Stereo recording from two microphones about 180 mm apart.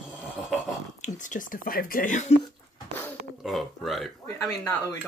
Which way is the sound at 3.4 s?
Centre (ahead or behind).